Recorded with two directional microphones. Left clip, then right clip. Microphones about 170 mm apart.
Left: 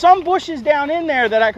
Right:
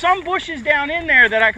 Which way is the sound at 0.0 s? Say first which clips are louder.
Left 5 dB; 25° left (ahead or behind).